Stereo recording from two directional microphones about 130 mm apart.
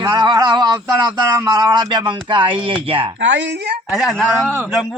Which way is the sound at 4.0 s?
Centre (ahead or behind).